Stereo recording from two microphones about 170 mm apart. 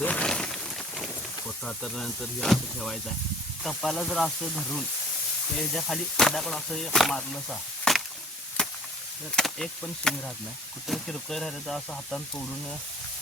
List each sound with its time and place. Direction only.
0.0 s a sound: 5° left (ahead or behind)
3.6 s speech: centre (ahead or behind)
8.6 s chop: 5° left (ahead or behind)
9.3 s speech: 5° left (ahead or behind)